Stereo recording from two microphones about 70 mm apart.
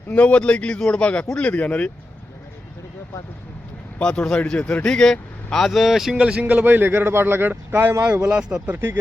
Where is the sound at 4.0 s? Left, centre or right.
Centre; by 7.9 s right.